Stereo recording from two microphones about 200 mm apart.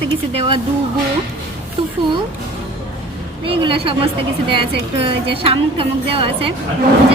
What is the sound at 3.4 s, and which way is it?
Speech, 25° right (ahead or behind).